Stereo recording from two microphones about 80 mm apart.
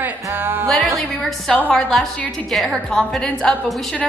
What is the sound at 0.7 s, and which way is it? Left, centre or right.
A woman's voice, centre.